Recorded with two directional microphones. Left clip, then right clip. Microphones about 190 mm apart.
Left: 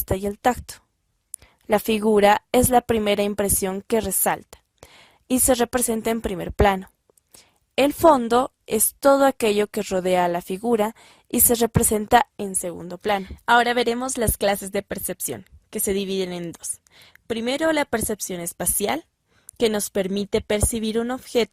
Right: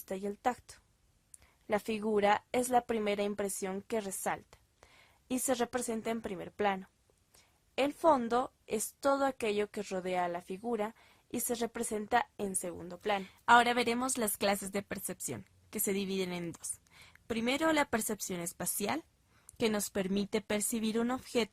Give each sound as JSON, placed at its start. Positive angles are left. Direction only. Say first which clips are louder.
{"t": 0.0, "sound": "a woman's voice", "louder": "left 13 dB", "side_deg": 50}
{"t": 12.6, "sound": "a woman's voice", "louder": "left 12 dB", "side_deg": 40}